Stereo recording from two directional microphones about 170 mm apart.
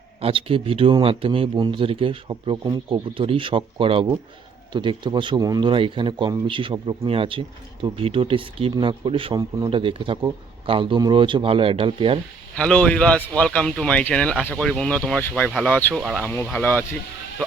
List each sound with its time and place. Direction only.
0.2 s speech: 35° right (ahead or behind)
12.5 s speech: 5° left (ahead or behind)